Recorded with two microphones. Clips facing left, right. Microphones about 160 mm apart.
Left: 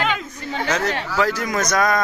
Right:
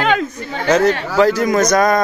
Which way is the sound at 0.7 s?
35° right (ahead or behind).